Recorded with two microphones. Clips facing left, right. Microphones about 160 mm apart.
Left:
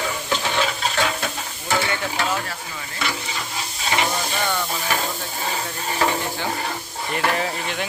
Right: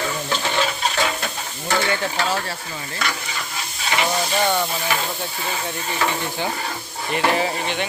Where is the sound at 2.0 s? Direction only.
30° right (ahead or behind).